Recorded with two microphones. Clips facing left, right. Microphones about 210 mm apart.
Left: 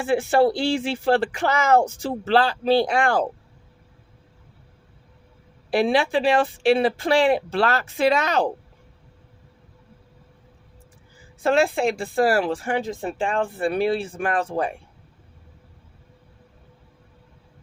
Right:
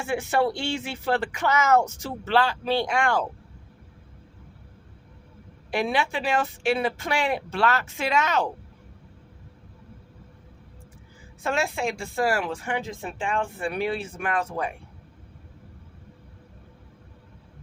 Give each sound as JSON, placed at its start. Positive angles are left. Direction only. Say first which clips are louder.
{"t": 0.0, "sound": "speech", "louder": "left 6 dB", "side_deg": 35}
{"t": 5.7, "sound": "speech", "louder": "left 6 dB", "side_deg": 30}
{"t": 11.7, "sound": "speech", "louder": "left 6 dB", "side_deg": 35}